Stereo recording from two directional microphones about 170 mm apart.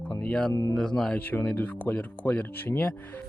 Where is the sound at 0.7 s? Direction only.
5° left (ahead or behind).